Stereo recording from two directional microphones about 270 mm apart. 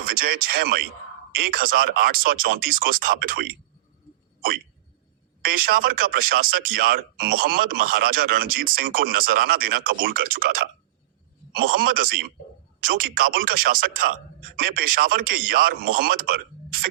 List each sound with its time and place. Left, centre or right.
0.0 s speech: right
4.4 s hiccup: right
5.4 s speech: right